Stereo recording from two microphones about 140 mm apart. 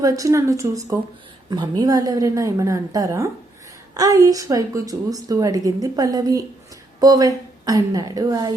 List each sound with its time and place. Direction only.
0.0 s a woman's voice: 25° right (ahead or behind)